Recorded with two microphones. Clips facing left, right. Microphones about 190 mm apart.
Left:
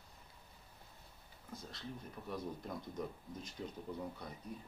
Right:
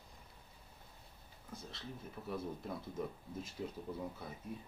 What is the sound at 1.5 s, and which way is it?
Speech, centre (ahead or behind).